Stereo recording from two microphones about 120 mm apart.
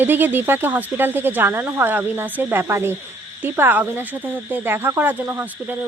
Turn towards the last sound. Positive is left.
turn(degrees=-15)  # may be behind; listen again after turning